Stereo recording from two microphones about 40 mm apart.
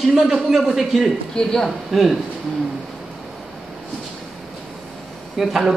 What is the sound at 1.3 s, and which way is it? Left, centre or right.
Speech, centre.